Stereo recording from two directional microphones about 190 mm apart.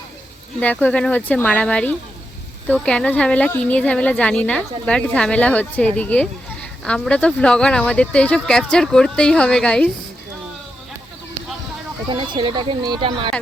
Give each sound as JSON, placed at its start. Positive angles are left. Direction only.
{"t": 0.6, "sound": "speech", "side_deg": 10}
{"t": 12.1, "sound": "speech", "side_deg": -25}